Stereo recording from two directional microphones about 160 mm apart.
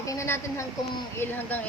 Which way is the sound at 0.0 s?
20° left (ahead or behind).